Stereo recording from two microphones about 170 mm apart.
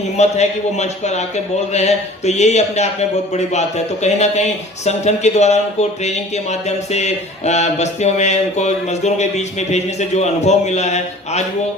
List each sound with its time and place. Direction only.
0.2 s speech: 40° left (ahead or behind)